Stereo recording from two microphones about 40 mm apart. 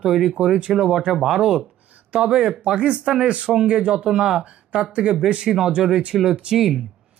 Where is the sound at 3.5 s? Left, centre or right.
Centre.